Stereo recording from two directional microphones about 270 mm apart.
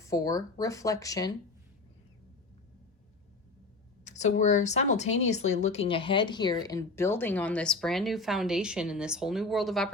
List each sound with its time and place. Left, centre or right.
0.0 s speech: centre
4.0 s speech: left; by 9.9 s centre